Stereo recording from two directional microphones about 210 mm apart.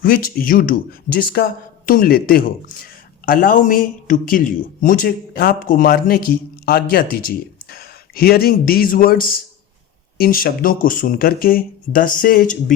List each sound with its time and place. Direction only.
0.0 s speech: 45° left (ahead or behind)